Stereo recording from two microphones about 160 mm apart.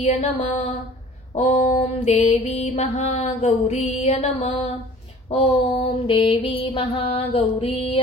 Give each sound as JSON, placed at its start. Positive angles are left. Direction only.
{"t": 0.0, "sound": "music", "side_deg": 45}
{"t": 1.3, "sound": "mantra", "side_deg": 40}